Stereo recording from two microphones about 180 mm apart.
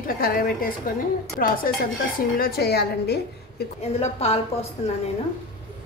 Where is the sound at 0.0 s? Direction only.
55° left (ahead or behind).